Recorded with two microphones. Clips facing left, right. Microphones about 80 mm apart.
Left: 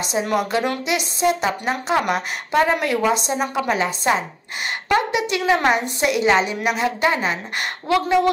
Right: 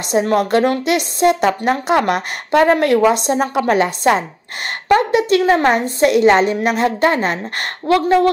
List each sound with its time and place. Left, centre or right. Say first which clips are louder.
0.1 s a woman's voice: right 7 dB; right
4.8 s a woman's voice: right 7 dB; right